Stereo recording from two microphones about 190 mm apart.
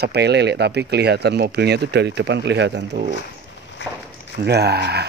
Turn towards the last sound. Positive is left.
turn(degrees=-60)  # may be behind; listen again after turning